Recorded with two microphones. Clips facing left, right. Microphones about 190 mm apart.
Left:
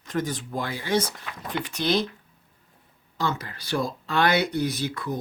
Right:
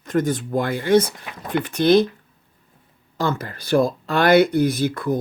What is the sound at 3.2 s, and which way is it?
Speech, 50° right (ahead or behind).